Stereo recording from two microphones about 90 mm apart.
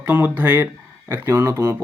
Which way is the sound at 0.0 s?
20° right (ahead or behind).